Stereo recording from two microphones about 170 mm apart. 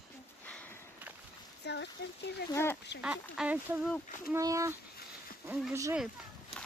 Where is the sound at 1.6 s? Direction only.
90° left.